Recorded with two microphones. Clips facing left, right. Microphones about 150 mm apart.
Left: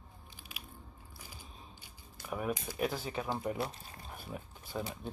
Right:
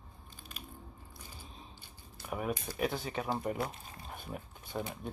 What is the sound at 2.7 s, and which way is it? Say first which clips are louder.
Speech: right 1 dB; centre (ahead or behind).